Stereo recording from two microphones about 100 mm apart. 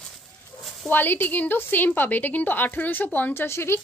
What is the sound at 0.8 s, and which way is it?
A woman's voice, 20° left (ahead or behind).